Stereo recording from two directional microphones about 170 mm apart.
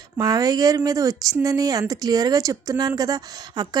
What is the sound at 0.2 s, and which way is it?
Speech, 20° right (ahead or behind).